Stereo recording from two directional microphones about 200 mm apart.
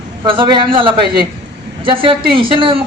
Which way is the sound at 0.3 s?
25° right (ahead or behind).